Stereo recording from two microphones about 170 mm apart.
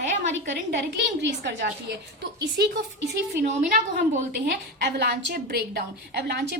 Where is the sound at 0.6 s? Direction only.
90° right.